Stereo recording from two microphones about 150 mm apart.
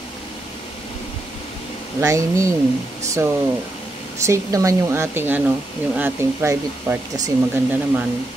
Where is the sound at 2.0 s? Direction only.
20° right (ahead or behind).